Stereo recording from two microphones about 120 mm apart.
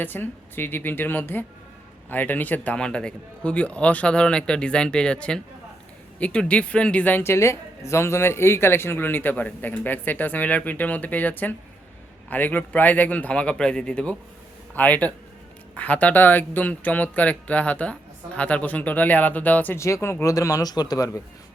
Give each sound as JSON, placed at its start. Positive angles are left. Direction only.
{"t": 0.0, "sound": "speech", "side_deg": 15}